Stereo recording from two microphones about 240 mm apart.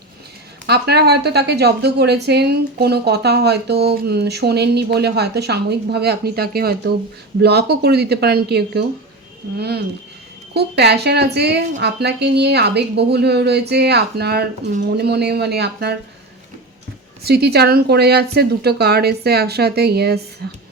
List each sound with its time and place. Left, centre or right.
0.7 s a woman's voice: right
17.2 s a woman's voice: right
20.4 s a sound: right